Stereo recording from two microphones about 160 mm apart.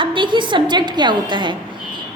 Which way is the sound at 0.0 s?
30° right (ahead or behind).